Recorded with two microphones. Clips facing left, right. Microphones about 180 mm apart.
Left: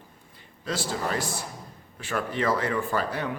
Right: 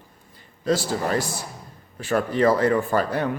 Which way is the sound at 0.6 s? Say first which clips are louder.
Right 7 dB; 40° right (ahead or behind).